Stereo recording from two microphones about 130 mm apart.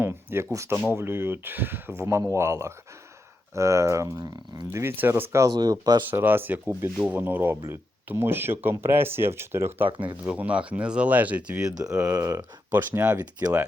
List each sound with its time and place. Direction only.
0.0 s speech: 20° right (ahead or behind)
5.5 s speech: 30° right (ahead or behind)
6.1 s speech: 15° right (ahead or behind)
12.0 s speech: 25° right (ahead or behind)